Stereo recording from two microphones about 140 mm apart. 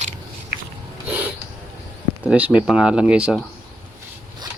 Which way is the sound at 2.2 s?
10° right (ahead or behind).